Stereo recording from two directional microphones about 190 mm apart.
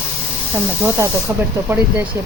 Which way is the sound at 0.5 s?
15° right (ahead or behind).